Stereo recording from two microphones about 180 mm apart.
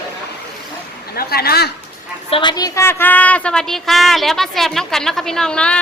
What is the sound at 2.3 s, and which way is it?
A woman's voice, 30° left (ahead or behind).